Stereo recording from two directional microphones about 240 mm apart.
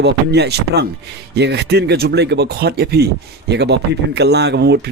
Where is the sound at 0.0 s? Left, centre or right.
Right.